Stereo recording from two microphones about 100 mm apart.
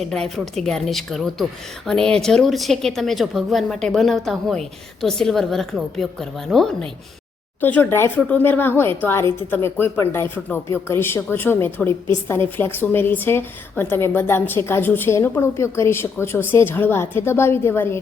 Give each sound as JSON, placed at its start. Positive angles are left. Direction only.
{"t": 0.0, "sound": "a woman's voice", "side_deg": 5}
{"t": 7.6, "sound": "a woman's voice", "side_deg": 20}